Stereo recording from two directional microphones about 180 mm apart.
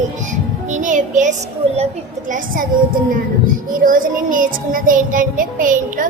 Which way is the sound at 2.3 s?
50° right (ahead or behind).